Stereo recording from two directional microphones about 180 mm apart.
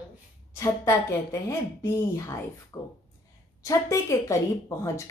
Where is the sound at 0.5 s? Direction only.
15° left (ahead or behind).